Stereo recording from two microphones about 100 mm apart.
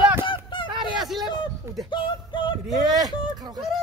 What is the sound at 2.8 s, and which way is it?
Speech, 40° right (ahead or behind).